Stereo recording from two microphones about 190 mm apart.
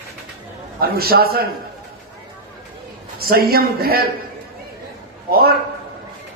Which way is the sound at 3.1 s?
55° right (ahead or behind).